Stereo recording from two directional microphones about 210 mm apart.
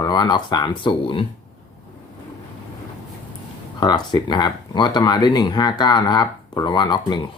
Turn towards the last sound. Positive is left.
turn(degrees=20)  # may be behind; listen again after turning